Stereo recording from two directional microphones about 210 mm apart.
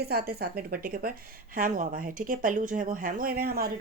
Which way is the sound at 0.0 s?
50° right (ahead or behind).